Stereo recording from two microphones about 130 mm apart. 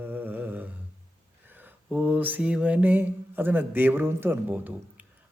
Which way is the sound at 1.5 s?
15° right (ahead or behind).